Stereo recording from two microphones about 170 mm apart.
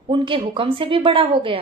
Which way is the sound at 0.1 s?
30° right (ahead or behind).